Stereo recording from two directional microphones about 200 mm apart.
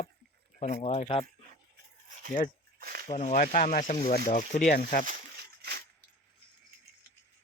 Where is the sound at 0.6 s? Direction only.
40° left (ahead or behind).